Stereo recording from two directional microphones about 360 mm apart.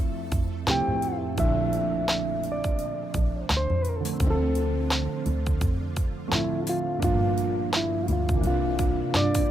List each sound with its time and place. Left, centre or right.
0.6 s music: centre
6.3 s music: centre
8.3 s music: centre